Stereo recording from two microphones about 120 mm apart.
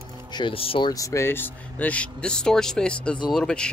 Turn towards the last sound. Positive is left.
turn(degrees=5)  # may be behind; listen again after turning